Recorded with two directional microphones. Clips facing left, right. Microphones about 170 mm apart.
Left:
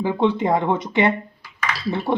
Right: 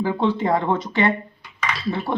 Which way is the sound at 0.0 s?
20° left (ahead or behind).